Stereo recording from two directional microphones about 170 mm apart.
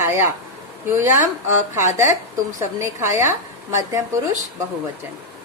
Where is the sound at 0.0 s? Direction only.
15° right (ahead or behind).